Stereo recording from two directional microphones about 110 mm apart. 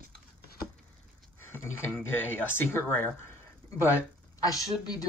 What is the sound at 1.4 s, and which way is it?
Speech, 20° left (ahead or behind).